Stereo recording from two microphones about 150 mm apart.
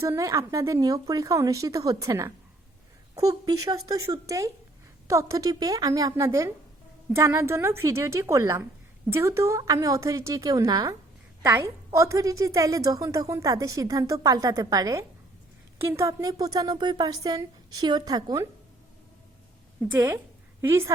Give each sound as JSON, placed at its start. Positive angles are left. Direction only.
{"t": 0.0, "sound": "a woman's voice", "side_deg": -20}
{"t": 20.6, "sound": "a woman's voice", "side_deg": -20}